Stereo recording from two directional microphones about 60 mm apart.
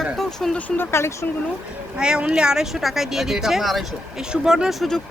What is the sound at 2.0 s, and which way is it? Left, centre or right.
Speech, centre.